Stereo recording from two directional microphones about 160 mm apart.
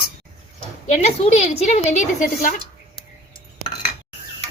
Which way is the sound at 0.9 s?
40° left (ahead or behind).